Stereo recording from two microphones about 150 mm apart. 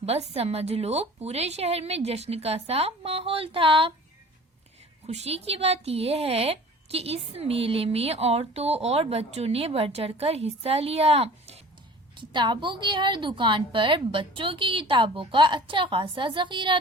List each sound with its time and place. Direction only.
0.0 s a woman's voice: 45° right (ahead or behind)
5.0 s speech: 45° right (ahead or behind)
12.1 s speech: 30° right (ahead or behind)